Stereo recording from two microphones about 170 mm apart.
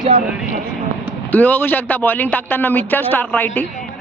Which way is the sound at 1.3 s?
10° left (ahead or behind).